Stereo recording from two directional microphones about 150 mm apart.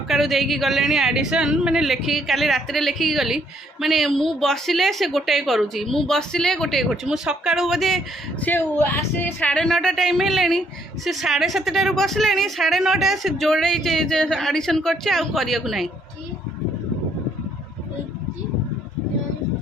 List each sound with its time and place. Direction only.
0.1 s speech: centre (ahead or behind)
8.4 s speech: 15° left (ahead or behind)